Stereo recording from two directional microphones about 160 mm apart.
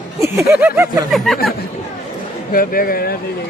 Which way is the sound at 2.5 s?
65° left (ahead or behind).